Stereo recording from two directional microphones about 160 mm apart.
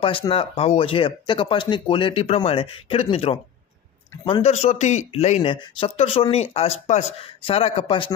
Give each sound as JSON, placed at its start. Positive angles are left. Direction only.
{"t": 0.3, "sound": "speech", "side_deg": 35}
{"t": 4.4, "sound": "speech", "side_deg": 45}